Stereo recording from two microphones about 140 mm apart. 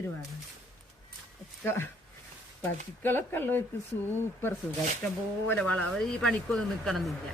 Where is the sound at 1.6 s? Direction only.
15° left (ahead or behind).